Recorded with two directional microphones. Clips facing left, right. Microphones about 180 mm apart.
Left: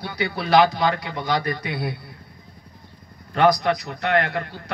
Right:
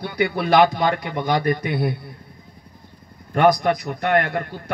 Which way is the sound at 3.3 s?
50° right (ahead or behind).